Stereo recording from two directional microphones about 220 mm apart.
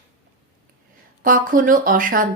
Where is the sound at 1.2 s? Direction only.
40° right (ahead or behind).